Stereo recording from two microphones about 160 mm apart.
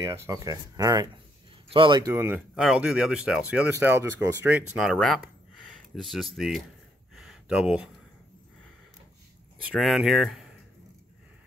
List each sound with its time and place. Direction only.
0.0 s speech: 20° right (ahead or behind)
2.1 s speech: 15° right (ahead or behind)
4.7 s speech: centre (ahead or behind)
7.2 s a sound: centre (ahead or behind)
9.7 s speech: centre (ahead or behind)